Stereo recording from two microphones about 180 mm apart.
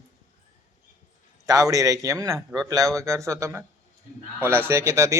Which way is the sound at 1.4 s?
20° right (ahead or behind).